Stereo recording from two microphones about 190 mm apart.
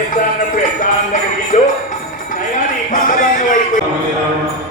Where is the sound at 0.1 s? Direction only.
45° left (ahead or behind).